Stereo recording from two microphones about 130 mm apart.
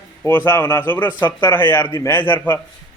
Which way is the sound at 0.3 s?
15° left (ahead or behind).